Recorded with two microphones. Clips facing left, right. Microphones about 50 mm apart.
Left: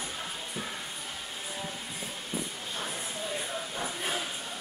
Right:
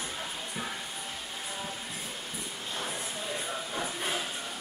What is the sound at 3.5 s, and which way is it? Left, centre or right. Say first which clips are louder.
Music: right 1 dB; centre.